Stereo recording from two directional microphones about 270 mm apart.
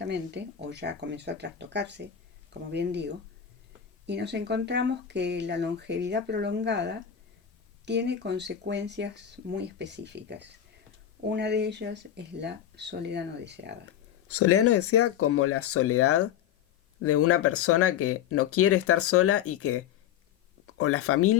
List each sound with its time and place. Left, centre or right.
0.0 s speech: right
14.3 s speech: left